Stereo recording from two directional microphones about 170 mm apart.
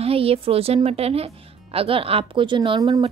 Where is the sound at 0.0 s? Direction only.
35° right (ahead or behind).